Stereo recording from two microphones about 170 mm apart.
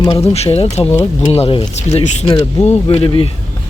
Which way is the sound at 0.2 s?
35° left (ahead or behind).